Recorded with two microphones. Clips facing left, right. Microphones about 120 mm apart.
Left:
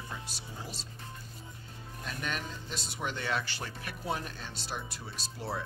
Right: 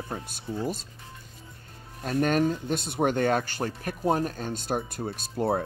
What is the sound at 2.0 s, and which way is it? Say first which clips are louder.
Speech: right 15 dB; 50° right (ahead or behind).